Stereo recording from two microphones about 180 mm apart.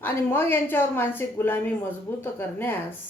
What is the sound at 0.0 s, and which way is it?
Speech, 10° left (ahead or behind).